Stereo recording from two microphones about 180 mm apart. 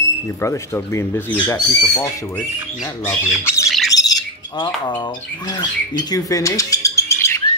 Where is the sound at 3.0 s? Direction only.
15° left (ahead or behind).